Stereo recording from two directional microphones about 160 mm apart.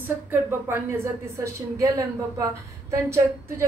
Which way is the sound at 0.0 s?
15° right (ahead or behind).